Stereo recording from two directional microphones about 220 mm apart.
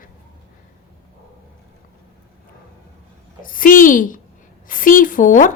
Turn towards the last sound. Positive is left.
turn(degrees=35)  # may be behind; listen again after turning